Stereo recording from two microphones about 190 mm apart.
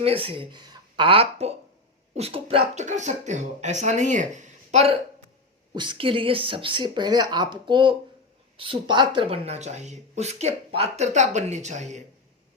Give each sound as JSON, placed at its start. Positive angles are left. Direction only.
{"t": 0.0, "sound": "speech", "side_deg": -30}
{"t": 5.7, "sound": "speech", "side_deg": -25}